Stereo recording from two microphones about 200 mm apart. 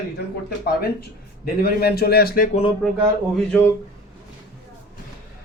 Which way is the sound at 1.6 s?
50° left (ahead or behind).